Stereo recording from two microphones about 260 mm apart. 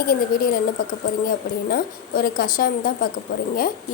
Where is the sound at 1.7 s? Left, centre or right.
Left.